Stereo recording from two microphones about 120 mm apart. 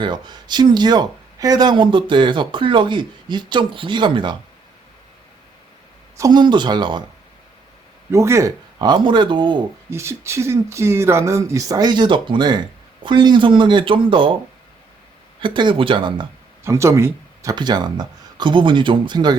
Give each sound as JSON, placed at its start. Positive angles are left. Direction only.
{"t": 0.0, "sound": "speech", "side_deg": -40}
{"t": 6.1, "sound": "speech", "side_deg": -35}
{"t": 8.1, "sound": "speech", "side_deg": -25}
{"t": 9.9, "sound": "speech", "side_deg": -20}
{"t": 15.4, "sound": "speech", "side_deg": -40}
{"t": 16.6, "sound": "speech", "side_deg": -25}